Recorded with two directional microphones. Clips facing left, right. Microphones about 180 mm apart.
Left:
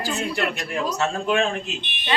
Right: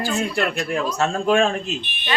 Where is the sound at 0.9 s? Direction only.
45° right (ahead or behind).